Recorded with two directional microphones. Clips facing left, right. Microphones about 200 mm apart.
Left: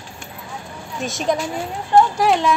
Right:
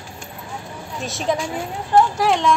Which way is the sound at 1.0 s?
Centre (ahead or behind).